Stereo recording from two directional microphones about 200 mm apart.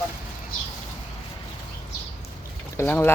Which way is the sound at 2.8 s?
10° left (ahead or behind).